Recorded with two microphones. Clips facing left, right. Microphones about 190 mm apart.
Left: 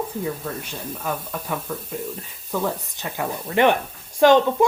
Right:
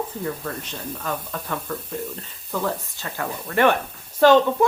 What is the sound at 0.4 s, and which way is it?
Speech, 10° left (ahead or behind).